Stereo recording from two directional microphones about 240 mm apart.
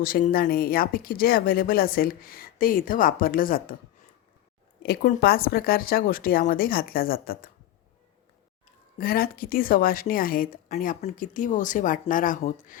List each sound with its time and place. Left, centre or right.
0.0 s speech: left
4.8 s speech: left
9.0 s speech: left